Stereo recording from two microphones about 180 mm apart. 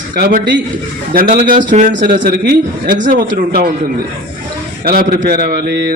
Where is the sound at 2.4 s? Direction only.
60° right (ahead or behind).